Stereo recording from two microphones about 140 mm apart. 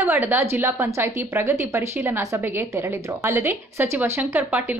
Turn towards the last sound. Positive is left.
turn(degrees=-15)  # may be behind; listen again after turning